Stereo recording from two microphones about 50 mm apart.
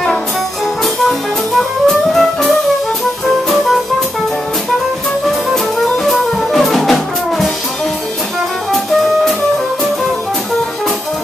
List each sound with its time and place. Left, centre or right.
1.9 s music: centre
6.0 s music: centre